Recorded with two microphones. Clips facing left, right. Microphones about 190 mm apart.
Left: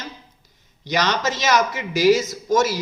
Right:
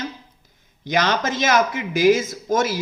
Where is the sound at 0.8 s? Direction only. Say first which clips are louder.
Right 1 dB; 50° right (ahead or behind).